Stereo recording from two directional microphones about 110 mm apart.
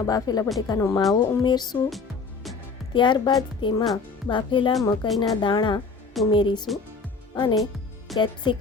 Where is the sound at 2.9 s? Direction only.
45° left (ahead or behind).